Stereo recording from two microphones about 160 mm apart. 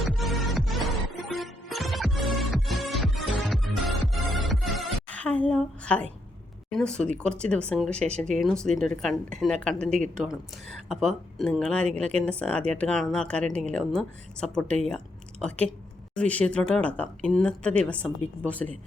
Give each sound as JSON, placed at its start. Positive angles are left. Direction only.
{"t": 0.0, "sound": "music", "side_deg": 0}
{"t": 6.7, "sound": "a woman's voice", "side_deg": 5}